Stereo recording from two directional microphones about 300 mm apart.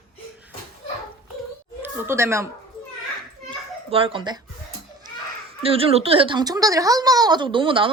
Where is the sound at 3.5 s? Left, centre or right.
Centre.